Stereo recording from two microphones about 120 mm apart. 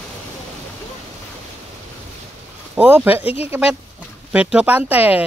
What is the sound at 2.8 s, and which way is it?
Speech, 15° right (ahead or behind).